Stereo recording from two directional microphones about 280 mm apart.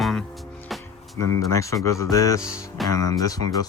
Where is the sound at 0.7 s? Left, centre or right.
Centre.